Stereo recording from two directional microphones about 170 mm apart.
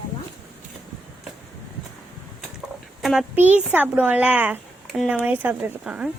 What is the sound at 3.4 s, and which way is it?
A child's voice, 10° right (ahead or behind).